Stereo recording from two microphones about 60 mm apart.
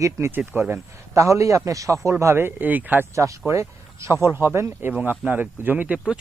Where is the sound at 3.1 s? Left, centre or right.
Right.